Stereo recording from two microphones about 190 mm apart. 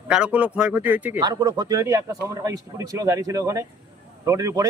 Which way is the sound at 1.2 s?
20° right (ahead or behind).